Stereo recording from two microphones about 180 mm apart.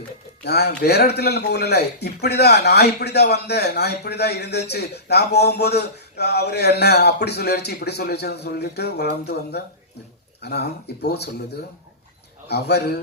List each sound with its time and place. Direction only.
0.4 s a man's voice: 65° left (ahead or behind)
12.5 s a man's voice: 65° left (ahead or behind)